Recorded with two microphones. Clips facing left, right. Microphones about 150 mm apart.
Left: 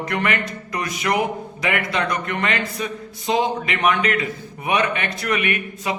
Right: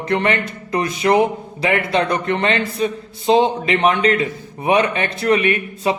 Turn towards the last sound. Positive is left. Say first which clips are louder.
# right 6 dB
turn(degrees=-30)  # may be behind; listen again after turning